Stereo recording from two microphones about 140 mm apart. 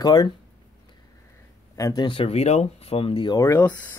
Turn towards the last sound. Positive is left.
turn(degrees=15)  # may be behind; listen again after turning